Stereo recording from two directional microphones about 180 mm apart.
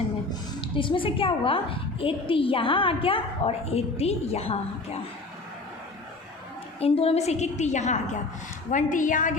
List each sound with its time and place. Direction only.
0.6 s a woman's voice: 25° left (ahead or behind)
6.7 s a woman's voice: 35° left (ahead or behind)